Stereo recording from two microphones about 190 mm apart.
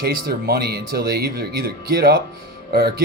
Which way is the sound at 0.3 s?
55° right (ahead or behind).